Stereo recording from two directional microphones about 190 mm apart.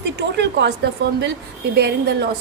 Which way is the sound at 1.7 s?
60° right (ahead or behind).